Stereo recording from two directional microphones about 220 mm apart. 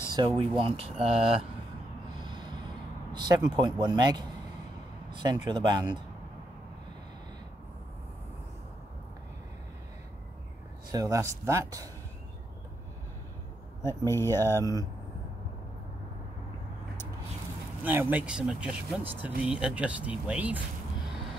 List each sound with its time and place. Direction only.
0.1 s speech: 20° right (ahead or behind)
3.1 s a sound: 20° right (ahead or behind)
3.4 s speech: 20° right (ahead or behind)
10.9 s speech: 15° right (ahead or behind)
13.8 s speech: 10° left (ahead or behind)
17.8 s speech: 10° right (ahead or behind)